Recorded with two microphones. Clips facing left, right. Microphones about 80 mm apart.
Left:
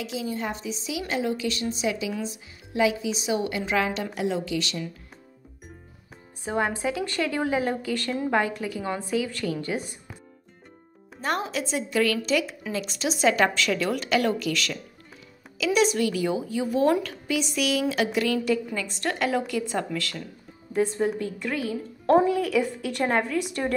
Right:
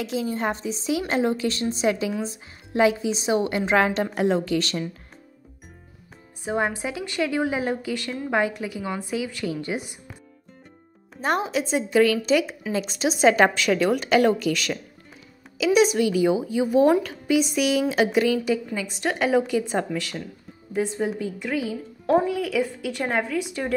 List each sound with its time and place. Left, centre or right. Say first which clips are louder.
0.0 s a woman's voice: right 4 dB; right
6.4 s a woman's voice: right 1 dB; centre
11.1 s a woman's voice: right 4 dB; centre
20.7 s a woman's voice: left 1 dB; centre